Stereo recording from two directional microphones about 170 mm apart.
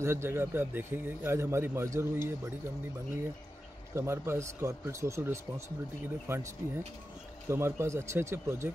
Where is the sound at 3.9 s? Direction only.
15° right (ahead or behind).